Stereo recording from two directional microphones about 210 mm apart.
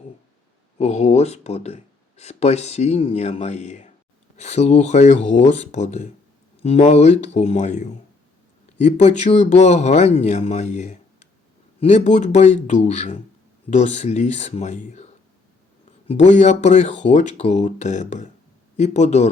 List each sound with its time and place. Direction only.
0.8 s speech: 30° left (ahead or behind)
16.0 s speech: 35° left (ahead or behind)